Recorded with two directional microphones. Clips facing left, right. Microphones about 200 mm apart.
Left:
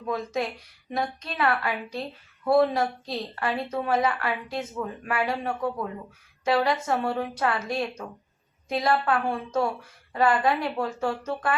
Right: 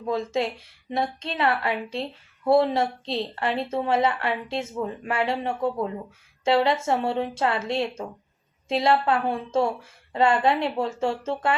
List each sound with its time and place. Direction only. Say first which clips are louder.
0.0 s a woman's voice: right 3 dB; 25° right (ahead or behind)